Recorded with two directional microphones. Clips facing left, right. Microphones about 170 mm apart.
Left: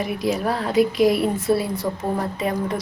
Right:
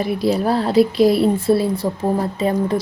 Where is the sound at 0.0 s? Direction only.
30° right (ahead or behind).